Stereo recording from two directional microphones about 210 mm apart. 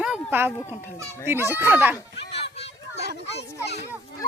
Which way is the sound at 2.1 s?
55° left (ahead or behind).